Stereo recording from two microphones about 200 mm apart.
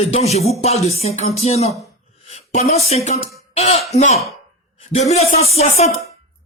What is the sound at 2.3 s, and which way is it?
Speech, 35° left (ahead or behind).